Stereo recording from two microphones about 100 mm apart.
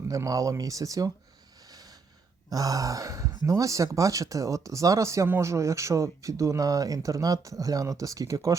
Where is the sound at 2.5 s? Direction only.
35° right (ahead or behind).